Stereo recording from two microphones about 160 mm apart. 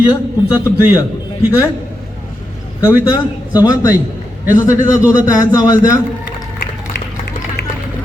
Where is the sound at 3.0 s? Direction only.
25° left (ahead or behind).